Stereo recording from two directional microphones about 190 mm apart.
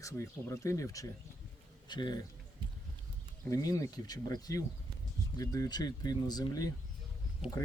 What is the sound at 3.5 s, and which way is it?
Speech, 15° left (ahead or behind).